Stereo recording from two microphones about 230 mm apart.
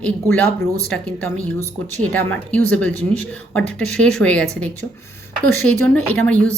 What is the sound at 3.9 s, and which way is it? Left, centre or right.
Speech, centre.